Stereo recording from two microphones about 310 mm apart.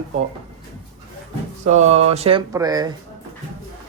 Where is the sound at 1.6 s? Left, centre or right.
Right.